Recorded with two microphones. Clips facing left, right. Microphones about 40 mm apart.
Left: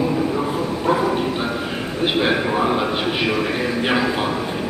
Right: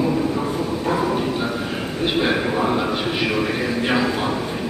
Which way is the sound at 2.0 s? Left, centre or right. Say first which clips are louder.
Left 1 dB; centre.